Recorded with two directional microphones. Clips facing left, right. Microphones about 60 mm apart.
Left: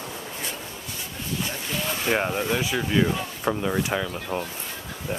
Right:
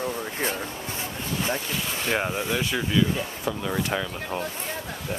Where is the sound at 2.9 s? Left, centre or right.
Left.